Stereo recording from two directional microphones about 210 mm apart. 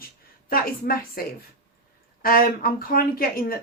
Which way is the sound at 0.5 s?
45° left (ahead or behind).